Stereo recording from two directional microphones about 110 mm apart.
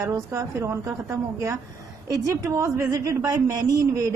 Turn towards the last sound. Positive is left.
turn(degrees=-30)  # may be behind; listen again after turning